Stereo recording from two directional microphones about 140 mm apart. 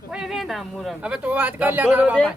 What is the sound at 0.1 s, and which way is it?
Speech, 5° right (ahead or behind).